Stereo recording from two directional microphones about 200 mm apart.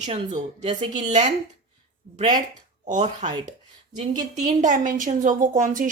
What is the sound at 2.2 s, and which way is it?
Speech, 20° right (ahead or behind).